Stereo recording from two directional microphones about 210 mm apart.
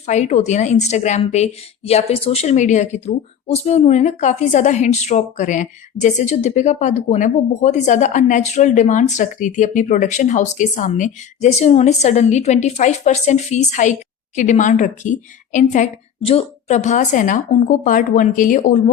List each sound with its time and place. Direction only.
0.0 s a woman's voice: 35° left (ahead or behind)